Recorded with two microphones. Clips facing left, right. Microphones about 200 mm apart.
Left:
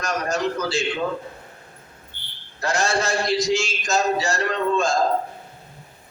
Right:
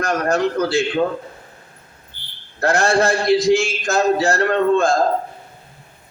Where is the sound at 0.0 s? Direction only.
55° right (ahead or behind).